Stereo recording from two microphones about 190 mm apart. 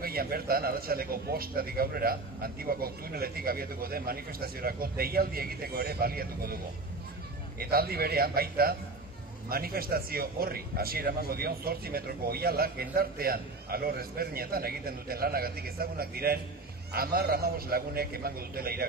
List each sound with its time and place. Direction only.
0.0 s a man's voice: 50° right (ahead or behind)